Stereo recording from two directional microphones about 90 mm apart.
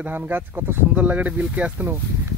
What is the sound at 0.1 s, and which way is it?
Speech, 20° right (ahead or behind).